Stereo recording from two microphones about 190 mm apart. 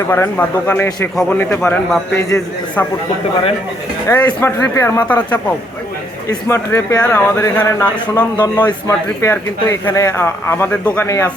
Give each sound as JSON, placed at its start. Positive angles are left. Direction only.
{"t": 0.1, "sound": "a man's voice", "side_deg": 10}
{"t": 4.1, "sound": "a man's voice", "side_deg": 15}